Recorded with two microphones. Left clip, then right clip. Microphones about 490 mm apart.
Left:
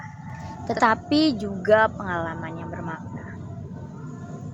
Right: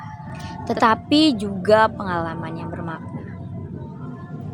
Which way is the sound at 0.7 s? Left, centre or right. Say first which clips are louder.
Right 3 dB; left.